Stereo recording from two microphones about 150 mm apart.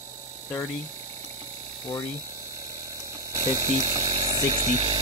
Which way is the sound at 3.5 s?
25° right (ahead or behind).